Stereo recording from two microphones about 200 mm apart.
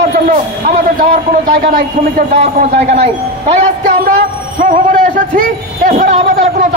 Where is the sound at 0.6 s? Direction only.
40° right (ahead or behind).